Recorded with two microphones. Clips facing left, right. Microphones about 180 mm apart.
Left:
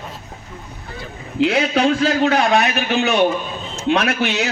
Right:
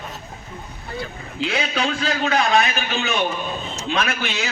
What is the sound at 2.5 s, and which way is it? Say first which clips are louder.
A man's voice: left 3 dB; 70° left (ahead or behind).